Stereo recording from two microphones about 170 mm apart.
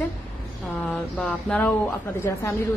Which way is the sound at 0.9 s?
5° left (ahead or behind).